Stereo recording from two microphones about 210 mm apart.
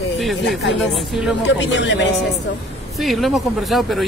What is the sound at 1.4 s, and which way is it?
Speech, 60° left (ahead or behind).